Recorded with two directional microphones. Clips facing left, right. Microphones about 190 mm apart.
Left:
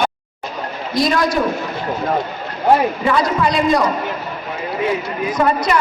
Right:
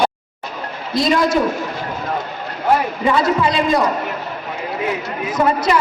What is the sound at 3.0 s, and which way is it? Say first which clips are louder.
Speech: right 1 dB; 25° right (ahead or behind).